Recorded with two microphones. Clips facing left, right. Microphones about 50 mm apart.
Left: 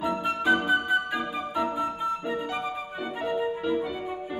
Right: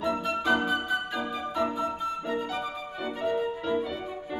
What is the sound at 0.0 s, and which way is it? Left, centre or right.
Music, centre.